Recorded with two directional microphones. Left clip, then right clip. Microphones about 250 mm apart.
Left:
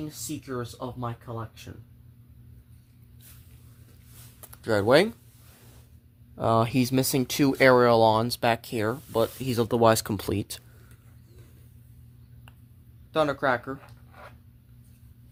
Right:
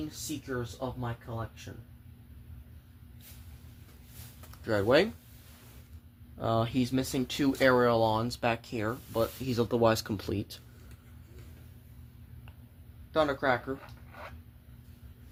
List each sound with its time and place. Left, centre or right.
4.5 s speech: left
6.3 s speech: left
13.1 s speech: left